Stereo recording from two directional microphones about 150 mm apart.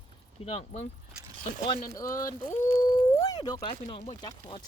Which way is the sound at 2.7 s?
25° left (ahead or behind).